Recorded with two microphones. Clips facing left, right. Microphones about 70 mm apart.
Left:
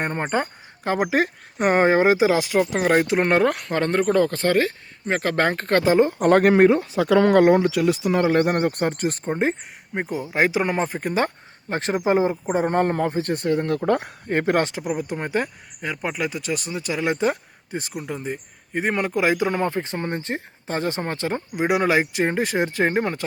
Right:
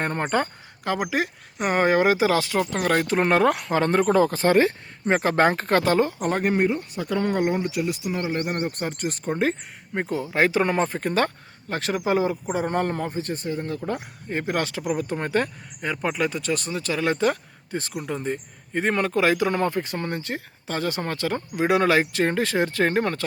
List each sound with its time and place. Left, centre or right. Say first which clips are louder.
0.0 s speech: even; centre
1.1 s speech: left 4 dB; left; by 3.1 s centre
3.1 s speech: left 1 dB; centre
6.1 s speech: left 8 dB; left
6.4 s speech: left 7 dB; left
9.2 s speech: right 2 dB; left
11.7 s speech: left 3 dB; left
13.4 s speech: left 7 dB; left
14.6 s speech: left 1 dB; left
17.9 s speech: right 2 dB; centre